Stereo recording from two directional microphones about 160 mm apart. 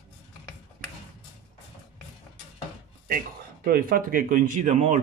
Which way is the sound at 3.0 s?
65° right (ahead or behind).